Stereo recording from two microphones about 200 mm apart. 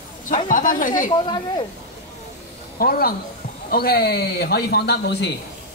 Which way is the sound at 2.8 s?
45° left (ahead or behind).